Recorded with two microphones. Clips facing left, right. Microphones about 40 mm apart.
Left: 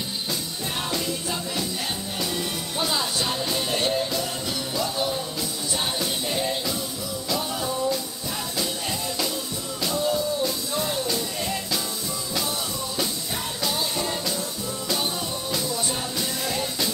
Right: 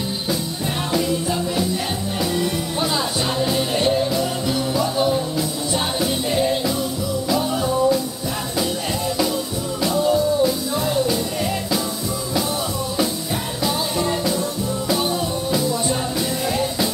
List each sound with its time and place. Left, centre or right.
2.3 s music: centre
4.9 s music: centre
10.0 s music: centre
13.9 s music: centre
15.5 s music: centre